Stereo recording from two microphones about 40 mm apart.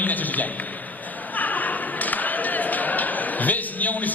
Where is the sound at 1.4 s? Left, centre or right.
Left.